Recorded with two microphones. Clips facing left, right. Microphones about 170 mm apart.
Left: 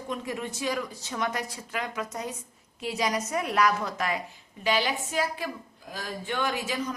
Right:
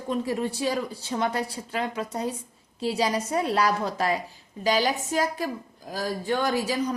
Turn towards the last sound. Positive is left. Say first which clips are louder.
# right 4 dB
turn(degrees=-35)  # may be behind; listen again after turning